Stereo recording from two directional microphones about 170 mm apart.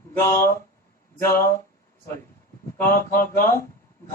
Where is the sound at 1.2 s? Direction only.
15° left (ahead or behind).